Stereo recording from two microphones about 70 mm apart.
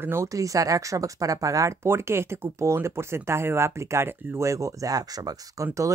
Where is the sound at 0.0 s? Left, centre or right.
Right.